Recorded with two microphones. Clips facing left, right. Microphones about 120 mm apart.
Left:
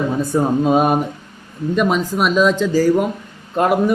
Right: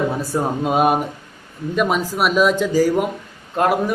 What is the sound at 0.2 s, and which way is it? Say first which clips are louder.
A man's voice: left 5 dB; 5° right (ahead or behind).